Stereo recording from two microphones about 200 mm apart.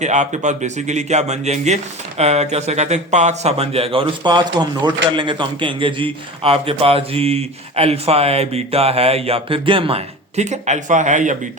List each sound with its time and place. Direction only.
0.0 s a man's voice: 35° right (ahead or behind)